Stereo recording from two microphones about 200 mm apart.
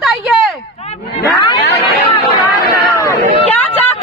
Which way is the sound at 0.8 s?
30° left (ahead or behind).